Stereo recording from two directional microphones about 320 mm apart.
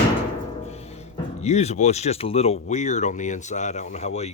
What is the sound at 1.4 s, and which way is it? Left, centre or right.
Speech, centre.